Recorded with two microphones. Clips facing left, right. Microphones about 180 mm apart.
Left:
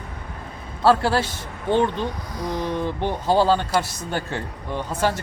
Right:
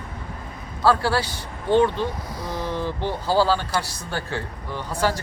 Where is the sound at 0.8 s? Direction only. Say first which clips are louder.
Left 2 dB; 25° left (ahead or behind).